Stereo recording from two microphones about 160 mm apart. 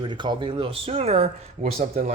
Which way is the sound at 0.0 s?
30° right (ahead or behind).